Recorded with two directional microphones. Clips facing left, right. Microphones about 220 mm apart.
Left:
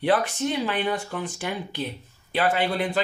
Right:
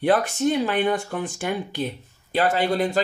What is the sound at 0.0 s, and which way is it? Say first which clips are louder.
Speech: right 3 dB; 45° right (ahead or behind).